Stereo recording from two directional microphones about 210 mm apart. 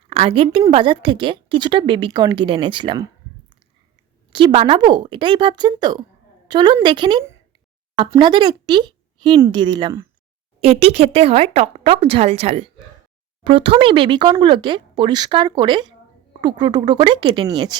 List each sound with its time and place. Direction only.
0.1 s a woman's voice: 25° right (ahead or behind)
4.3 s speech: 25° right (ahead or behind)